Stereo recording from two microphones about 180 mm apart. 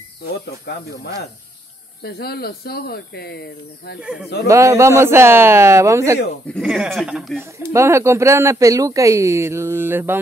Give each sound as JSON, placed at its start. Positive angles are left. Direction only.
{"t": 2.0, "sound": "speech", "side_deg": 60}
{"t": 4.0, "sound": "speech", "side_deg": -5}
{"t": 4.5, "sound": "speech", "side_deg": -15}
{"t": 6.4, "sound": "speech", "side_deg": 0}
{"t": 7.5, "sound": "speech", "side_deg": -15}